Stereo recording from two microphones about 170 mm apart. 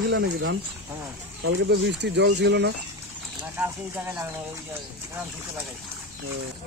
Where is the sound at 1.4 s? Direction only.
90° right.